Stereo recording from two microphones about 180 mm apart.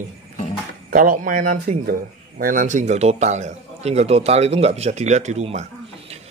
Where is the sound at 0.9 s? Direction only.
50° right (ahead or behind).